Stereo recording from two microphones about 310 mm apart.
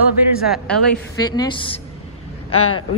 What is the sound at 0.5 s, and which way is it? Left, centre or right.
Speech, centre.